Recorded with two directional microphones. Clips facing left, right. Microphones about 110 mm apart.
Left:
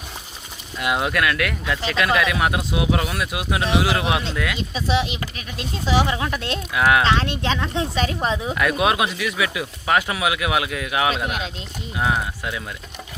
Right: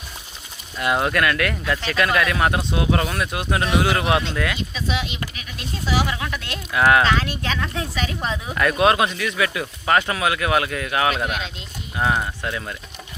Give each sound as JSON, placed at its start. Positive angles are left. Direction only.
{"t": 0.8, "sound": "speech", "side_deg": 5}
{"t": 4.7, "sound": "speech", "side_deg": 35}
{"t": 6.7, "sound": "speech", "side_deg": 5}
{"t": 7.0, "sound": "speech", "side_deg": 25}
{"t": 8.5, "sound": "speech", "side_deg": 5}